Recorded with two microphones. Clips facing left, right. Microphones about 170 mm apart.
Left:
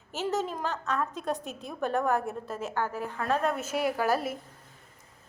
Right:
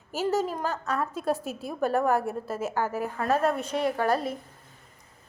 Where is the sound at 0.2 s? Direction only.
Centre (ahead or behind).